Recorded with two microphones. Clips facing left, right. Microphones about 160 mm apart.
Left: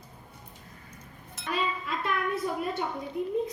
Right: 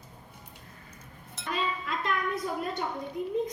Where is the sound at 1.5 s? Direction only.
Centre (ahead or behind).